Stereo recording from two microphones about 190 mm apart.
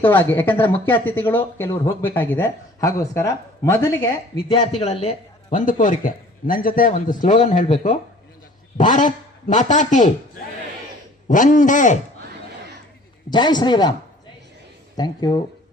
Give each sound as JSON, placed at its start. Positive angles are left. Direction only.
{"t": 0.0, "sound": "speech", "side_deg": 10}
{"t": 4.7, "sound": "a man's voice", "side_deg": 30}
{"t": 13.3, "sound": "a man's voice", "side_deg": 25}
{"t": 14.9, "sound": "a man's voice", "side_deg": 20}